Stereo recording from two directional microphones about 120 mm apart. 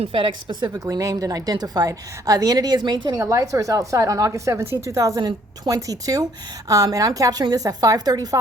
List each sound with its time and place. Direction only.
0.0 s a woman's voice: 45° right (ahead or behind)
0.9 s a woman's voice: 30° right (ahead or behind)